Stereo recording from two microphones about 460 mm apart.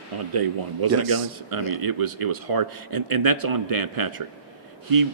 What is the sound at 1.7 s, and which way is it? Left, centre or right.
Speech, right.